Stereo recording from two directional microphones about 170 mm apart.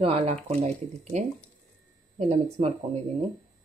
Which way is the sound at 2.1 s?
40° right (ahead or behind).